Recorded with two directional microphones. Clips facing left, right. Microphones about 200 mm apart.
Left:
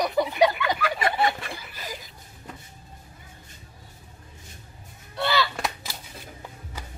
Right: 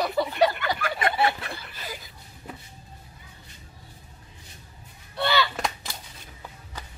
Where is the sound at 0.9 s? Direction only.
Centre (ahead or behind).